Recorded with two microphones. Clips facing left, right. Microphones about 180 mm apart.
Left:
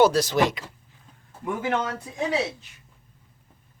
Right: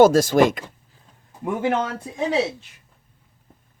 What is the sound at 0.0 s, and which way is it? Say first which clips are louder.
Speech: right 5 dB; 45° right (ahead or behind).